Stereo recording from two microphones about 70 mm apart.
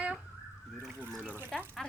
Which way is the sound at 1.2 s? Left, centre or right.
Right.